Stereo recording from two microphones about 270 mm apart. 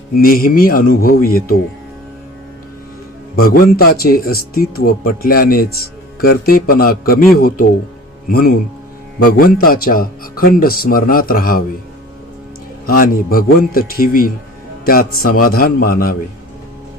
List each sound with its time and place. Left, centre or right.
0.2 s speech: left
3.3 s speech: left
12.8 s speech: left